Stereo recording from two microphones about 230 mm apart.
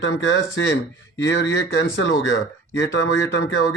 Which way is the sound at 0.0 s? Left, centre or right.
Left.